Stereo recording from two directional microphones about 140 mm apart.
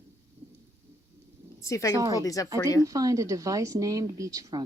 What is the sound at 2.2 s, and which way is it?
Speech, 25° left (ahead or behind).